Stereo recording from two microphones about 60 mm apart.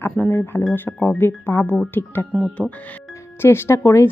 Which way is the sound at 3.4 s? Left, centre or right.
Left.